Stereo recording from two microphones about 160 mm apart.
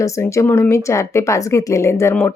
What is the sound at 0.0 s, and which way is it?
Speech, 15° left (ahead or behind).